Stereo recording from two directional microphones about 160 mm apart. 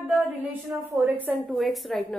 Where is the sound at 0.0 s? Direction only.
5° right (ahead or behind).